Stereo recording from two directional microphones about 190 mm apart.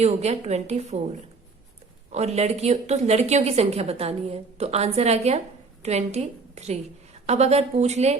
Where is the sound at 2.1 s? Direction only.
35° right (ahead or behind).